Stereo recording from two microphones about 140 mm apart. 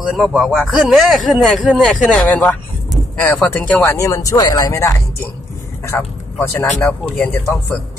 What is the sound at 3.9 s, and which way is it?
Speech, 25° left (ahead or behind).